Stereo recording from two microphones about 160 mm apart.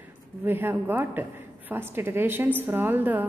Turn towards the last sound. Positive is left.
turn(degrees=-10)  # may be behind; listen again after turning